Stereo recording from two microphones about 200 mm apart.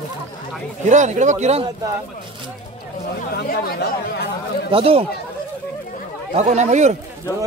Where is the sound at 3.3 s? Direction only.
50° left (ahead or behind).